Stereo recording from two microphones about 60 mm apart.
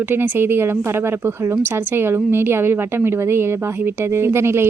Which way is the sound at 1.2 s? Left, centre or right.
Right.